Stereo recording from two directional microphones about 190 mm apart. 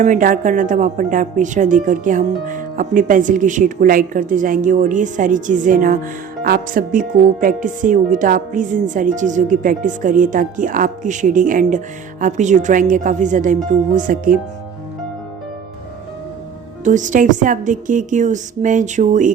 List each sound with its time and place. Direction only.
0.0 s a woman's voice: 45° right (ahead or behind)
16.8 s a woman's voice: 40° right (ahead or behind)